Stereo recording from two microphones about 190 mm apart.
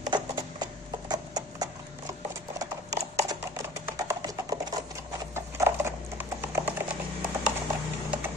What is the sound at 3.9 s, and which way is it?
Music, 15° right (ahead or behind).